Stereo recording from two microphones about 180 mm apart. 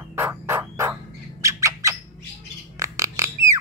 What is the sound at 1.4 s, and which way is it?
Squawk, 15° right (ahead or behind).